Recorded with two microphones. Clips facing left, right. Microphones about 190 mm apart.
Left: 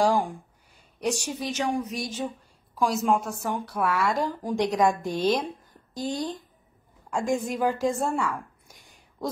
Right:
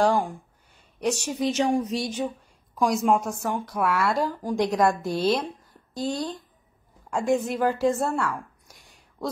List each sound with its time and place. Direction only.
0.0 s speech: 10° left (ahead or behind)
1.0 s a woman's voice: 5° right (ahead or behind)
1.5 s speech: 30° right (ahead or behind)
2.8 s a woman's voice: 5° left (ahead or behind)
3.3 s a woman's voice: 10° right (ahead or behind)
8.1 s speech: 10° left (ahead or behind)
8.6 s a sound: centre (ahead or behind)